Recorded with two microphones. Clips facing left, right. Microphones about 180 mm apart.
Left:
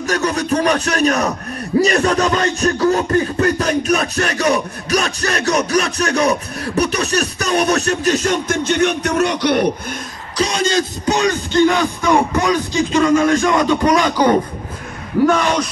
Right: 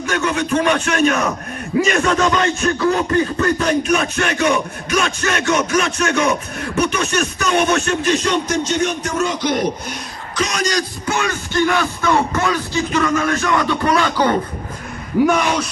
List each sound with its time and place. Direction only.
0.0 s a sound: 40° left (ahead or behind); by 9.7 s 65° left (ahead or behind)
10.3 s music: 30° left (ahead or behind); by 14.3 s 15° left (ahead or behind)
15.2 s speech: 10° right (ahead or behind)